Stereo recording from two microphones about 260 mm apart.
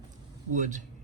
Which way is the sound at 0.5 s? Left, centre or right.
Right.